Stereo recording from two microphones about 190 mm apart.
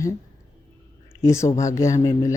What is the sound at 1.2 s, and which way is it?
A woman's voice, 15° left (ahead or behind).